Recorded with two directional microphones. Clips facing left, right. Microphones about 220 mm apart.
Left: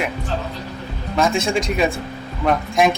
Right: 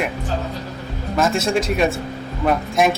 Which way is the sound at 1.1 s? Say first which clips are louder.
Even; centre (ahead or behind).